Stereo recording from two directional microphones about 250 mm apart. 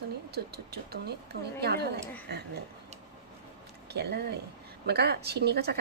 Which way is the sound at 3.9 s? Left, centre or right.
Right.